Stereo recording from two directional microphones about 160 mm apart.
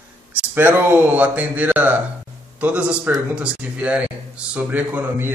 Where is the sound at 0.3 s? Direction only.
10° right (ahead or behind).